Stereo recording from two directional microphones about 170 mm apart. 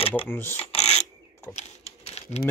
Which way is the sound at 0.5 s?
40° left (ahead or behind).